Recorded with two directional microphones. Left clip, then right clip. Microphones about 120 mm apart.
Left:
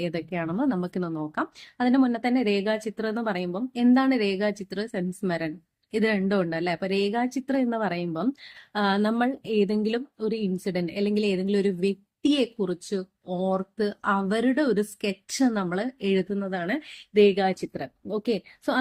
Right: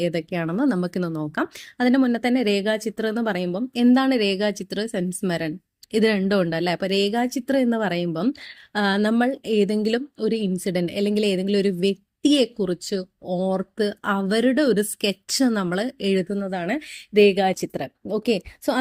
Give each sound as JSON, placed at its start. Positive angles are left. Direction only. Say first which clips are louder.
{"t": 0.0, "sound": "speech", "louder": "right 5 dB", "side_deg": -50}